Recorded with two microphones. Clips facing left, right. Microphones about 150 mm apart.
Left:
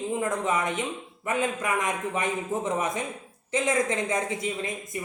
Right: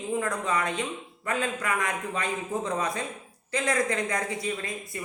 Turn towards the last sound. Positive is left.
turn(degrees=20)  # may be behind; listen again after turning